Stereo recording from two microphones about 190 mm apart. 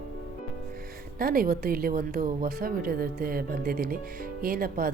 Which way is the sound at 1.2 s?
50° right (ahead or behind).